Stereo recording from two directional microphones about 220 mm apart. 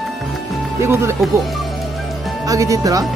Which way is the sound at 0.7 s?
10° right (ahead or behind).